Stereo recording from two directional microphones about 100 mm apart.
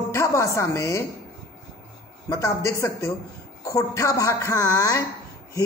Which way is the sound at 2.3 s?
30° left (ahead or behind).